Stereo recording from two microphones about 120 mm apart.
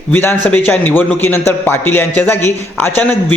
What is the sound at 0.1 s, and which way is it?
A man's voice, 15° left (ahead or behind).